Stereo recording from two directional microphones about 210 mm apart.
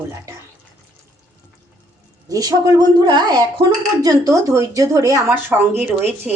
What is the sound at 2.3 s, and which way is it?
Speech, 15° right (ahead or behind).